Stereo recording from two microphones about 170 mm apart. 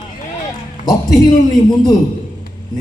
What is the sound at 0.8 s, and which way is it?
Speech, 20° left (ahead or behind).